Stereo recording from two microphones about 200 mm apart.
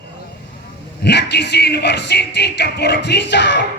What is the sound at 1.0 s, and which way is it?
Speech, 55° left (ahead or behind).